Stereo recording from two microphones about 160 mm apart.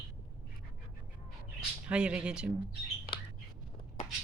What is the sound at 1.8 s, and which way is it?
Speech, 5° right (ahead or behind).